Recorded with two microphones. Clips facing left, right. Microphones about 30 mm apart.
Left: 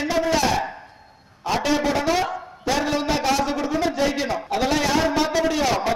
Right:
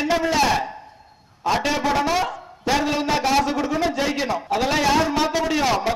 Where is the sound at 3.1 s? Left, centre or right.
Centre.